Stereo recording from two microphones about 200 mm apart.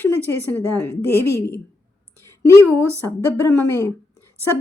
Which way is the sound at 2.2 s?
15° left (ahead or behind).